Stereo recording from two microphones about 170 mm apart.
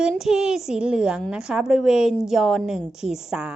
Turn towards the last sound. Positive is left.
turn(degrees=-5)  # may be behind; listen again after turning